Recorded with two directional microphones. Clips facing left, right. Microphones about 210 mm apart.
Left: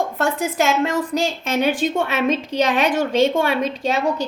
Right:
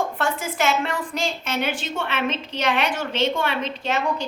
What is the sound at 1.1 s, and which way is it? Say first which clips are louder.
A woman's voice: left 5 dB; 40° left (ahead or behind).